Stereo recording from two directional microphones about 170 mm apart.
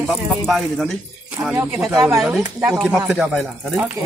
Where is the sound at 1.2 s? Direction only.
10° right (ahead or behind).